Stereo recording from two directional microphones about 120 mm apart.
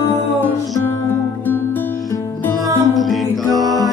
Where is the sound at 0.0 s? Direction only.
20° left (ahead or behind).